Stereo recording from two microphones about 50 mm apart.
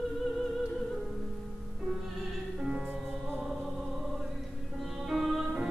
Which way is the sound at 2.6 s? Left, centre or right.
Centre.